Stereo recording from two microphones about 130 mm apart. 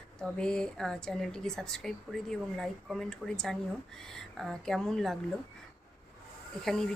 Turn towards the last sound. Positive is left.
turn(degrees=5)  # may be behind; listen again after turning